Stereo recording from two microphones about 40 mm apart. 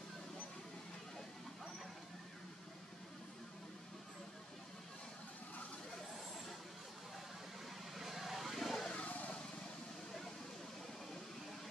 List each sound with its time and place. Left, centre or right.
7.9 s vehicle: centre
8.9 s vehicle: left